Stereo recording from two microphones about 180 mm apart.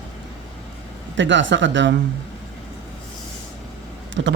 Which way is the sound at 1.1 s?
90° right.